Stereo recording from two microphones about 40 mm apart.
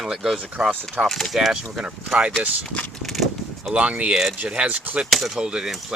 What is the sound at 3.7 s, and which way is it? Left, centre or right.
Speech, right.